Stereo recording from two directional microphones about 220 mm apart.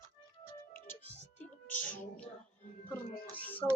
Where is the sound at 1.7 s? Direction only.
35° left (ahead or behind).